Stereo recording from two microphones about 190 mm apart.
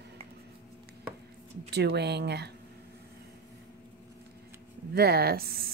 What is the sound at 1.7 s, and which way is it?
Speech, 60° right (ahead or behind).